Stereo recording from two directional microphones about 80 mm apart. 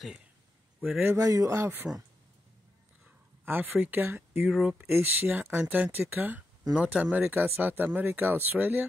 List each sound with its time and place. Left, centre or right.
0.8 s speech: centre
1.1 s speech: right
3.4 s speech: right
4.5 s speech: centre
4.7 s speech: right